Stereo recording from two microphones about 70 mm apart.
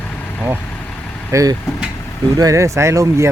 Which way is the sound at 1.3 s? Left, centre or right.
Right.